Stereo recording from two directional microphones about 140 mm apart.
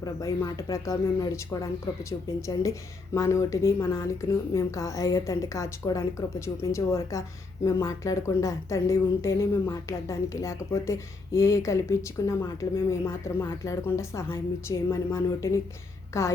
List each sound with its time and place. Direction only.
0.0 s speech: 25° left (ahead or behind)